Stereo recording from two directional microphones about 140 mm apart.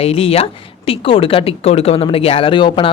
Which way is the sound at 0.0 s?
45° left (ahead or behind).